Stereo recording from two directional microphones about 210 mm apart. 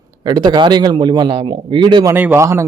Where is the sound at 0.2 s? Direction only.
20° right (ahead or behind).